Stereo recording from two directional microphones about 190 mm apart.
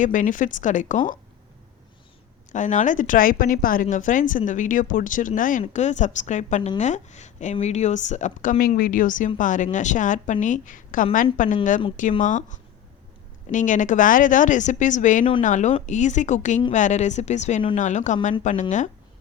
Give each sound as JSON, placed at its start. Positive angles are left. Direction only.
{"t": 0.0, "sound": "a woman's voice", "side_deg": 45}
{"t": 2.5, "sound": "a woman's voice", "side_deg": 40}